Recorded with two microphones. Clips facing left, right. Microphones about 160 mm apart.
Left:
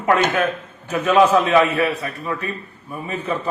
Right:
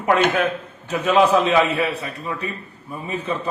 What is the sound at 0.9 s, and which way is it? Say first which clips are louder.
A man's voice: left 1 dB; 15° right (ahead or behind).